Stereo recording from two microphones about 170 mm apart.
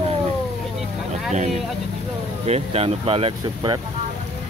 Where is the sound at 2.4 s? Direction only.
35° right (ahead or behind).